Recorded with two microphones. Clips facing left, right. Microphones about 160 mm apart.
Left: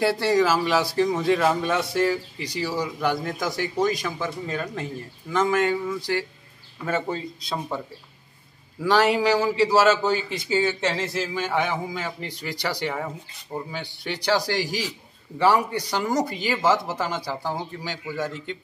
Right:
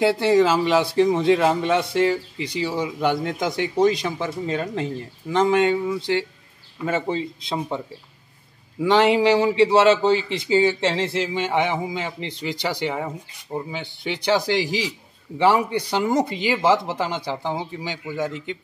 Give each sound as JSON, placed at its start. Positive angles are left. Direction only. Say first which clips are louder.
{"t": 0.0, "sound": "a man's voice", "louder": "right 3 dB", "side_deg": -20}
{"t": 8.8, "sound": "a man's voice", "louder": "right 3 dB", "side_deg": -20}